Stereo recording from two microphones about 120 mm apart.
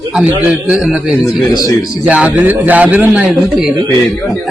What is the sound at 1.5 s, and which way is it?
Speech, 30° left (ahead or behind).